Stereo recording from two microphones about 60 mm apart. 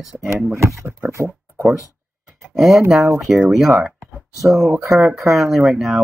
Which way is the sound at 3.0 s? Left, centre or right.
Right.